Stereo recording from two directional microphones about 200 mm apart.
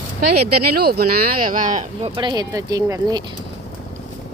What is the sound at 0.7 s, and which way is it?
Speech, 50° right (ahead or behind).